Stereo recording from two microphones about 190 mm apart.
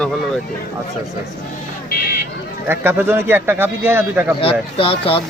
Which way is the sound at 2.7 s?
10° right (ahead or behind).